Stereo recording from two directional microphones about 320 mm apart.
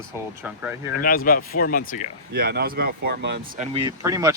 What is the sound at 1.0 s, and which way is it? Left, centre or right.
Speech, left.